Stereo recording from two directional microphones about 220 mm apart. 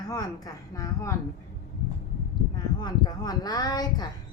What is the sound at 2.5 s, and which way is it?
A woman's voice, 20° left (ahead or behind).